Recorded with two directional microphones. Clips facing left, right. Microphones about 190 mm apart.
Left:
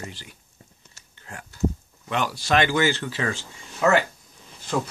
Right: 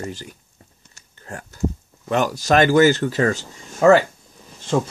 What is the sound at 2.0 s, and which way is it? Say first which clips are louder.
Speech: right 6 dB; 45° right (ahead or behind).